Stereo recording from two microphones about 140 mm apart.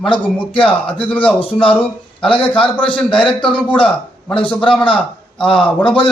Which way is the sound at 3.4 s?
10° left (ahead or behind).